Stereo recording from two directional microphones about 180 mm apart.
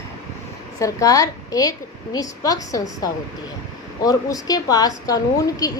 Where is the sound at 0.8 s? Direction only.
20° left (ahead or behind).